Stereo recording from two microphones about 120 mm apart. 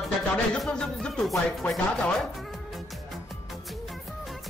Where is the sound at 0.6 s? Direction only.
5° left (ahead or behind).